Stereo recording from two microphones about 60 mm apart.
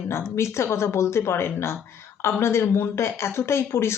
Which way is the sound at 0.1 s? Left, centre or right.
Left.